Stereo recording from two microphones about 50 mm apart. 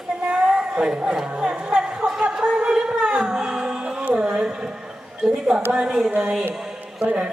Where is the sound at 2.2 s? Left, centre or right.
Centre.